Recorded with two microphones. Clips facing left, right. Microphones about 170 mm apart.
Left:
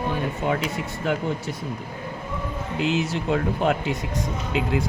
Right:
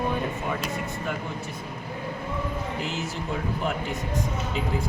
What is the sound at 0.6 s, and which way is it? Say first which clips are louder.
Speech: left 3 dB; 85° left.